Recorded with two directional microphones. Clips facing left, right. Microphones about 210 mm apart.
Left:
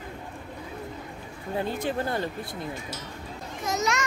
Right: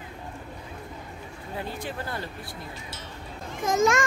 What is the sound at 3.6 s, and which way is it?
Speech, 50° right (ahead or behind).